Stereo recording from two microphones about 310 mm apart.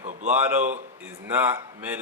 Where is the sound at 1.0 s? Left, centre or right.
Centre.